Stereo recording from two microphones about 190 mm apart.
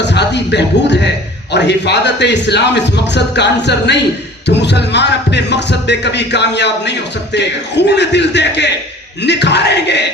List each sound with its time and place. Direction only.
0.0 s music: 65° left (ahead or behind)
1.5 s speech: 65° left (ahead or behind)